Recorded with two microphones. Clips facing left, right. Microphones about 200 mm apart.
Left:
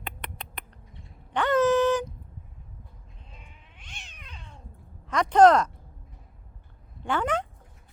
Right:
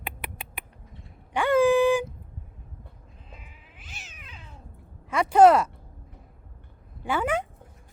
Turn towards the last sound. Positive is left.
turn(degrees=-10)  # may be behind; listen again after turning